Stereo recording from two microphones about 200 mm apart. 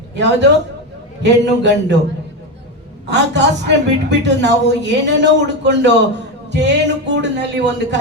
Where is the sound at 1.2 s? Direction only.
60° right (ahead or behind).